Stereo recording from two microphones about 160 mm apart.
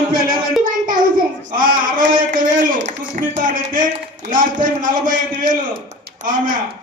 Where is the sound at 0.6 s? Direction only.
55° right (ahead or behind).